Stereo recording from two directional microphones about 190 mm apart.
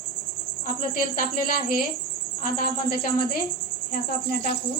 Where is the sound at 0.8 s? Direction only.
45° left (ahead or behind).